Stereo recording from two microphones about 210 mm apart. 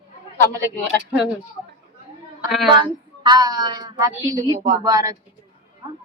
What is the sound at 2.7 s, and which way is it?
A woman's voice, 20° right (ahead or behind).